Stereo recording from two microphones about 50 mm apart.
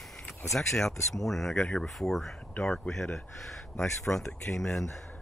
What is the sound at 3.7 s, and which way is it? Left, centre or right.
Speech, left.